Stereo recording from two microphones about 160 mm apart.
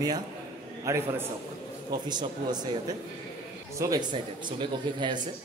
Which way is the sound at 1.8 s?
25° right (ahead or behind).